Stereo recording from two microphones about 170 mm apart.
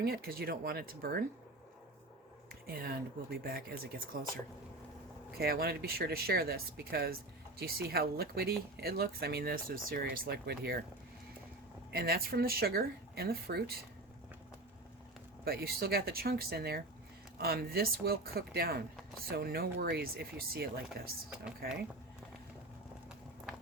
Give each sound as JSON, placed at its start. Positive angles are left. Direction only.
{"t": 0.0, "sound": "speech", "side_deg": -65}
{"t": 2.8, "sound": "speech", "side_deg": -65}
{"t": 5.4, "sound": "speech", "side_deg": -65}
{"t": 11.9, "sound": "speech", "side_deg": -65}
{"t": 15.4, "sound": "speech", "side_deg": -65}